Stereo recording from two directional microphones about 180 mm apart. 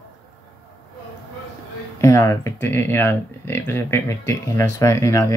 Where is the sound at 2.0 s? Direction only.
15° left (ahead or behind).